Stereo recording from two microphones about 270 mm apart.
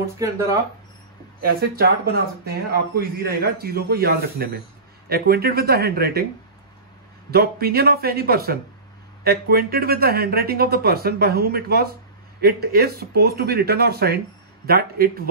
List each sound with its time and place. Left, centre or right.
0.2 s speech: centre
1.4 s speech: right
7.2 s speech: right